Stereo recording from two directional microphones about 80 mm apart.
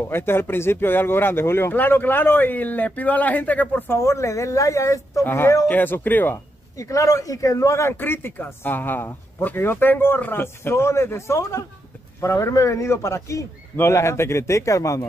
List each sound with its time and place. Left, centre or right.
0.1 s speech: left
3.9 s speech: left
5.2 s speech: left
6.3 s a man's voice: left
8.0 s speech: left